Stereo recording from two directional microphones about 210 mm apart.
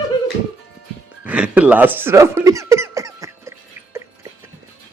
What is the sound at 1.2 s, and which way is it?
Squeak, 5° right (ahead or behind).